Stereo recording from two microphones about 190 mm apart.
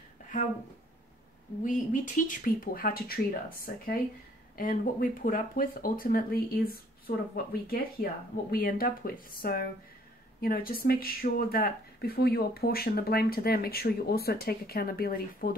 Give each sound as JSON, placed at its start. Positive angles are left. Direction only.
{"t": 1.6, "sound": "speech", "side_deg": 40}
{"t": 7.6, "sound": "speech", "side_deg": 50}